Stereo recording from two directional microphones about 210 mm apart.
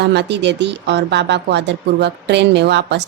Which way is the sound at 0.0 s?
55° right (ahead or behind).